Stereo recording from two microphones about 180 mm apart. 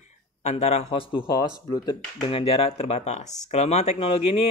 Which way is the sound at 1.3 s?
25° left (ahead or behind).